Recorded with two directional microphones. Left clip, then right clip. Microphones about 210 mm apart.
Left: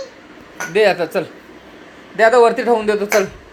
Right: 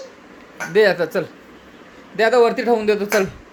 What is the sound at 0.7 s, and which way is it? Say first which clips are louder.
A man's voice: left 1 dB; 20° right (ahead or behind).